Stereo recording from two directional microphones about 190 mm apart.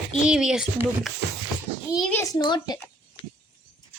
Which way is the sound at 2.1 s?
15° left (ahead or behind).